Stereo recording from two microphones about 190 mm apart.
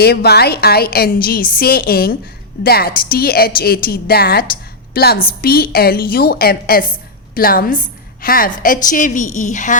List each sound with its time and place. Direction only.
0.0 s a woman's voice: 55° left (ahead or behind); by 9.7 s 40° left (ahead or behind)